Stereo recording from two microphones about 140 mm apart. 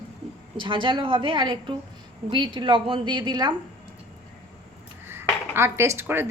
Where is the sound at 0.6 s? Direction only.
35° right (ahead or behind).